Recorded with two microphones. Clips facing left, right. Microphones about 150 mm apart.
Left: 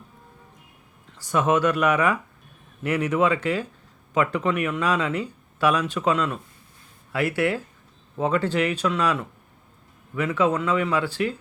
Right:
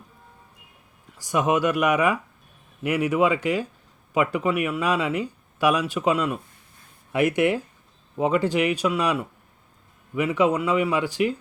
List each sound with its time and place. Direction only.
1.1 s speech: 10° right (ahead or behind)